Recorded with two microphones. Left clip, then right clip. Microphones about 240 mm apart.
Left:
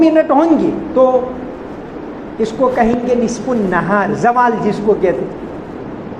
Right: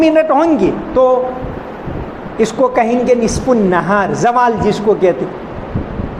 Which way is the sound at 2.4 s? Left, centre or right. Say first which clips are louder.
Right 1 dB; right.